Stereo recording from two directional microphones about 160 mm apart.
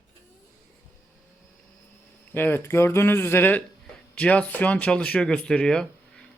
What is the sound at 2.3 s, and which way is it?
A man's voice, 15° left (ahead or behind).